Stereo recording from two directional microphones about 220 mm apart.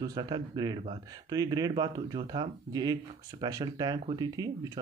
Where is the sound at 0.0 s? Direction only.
20° right (ahead or behind).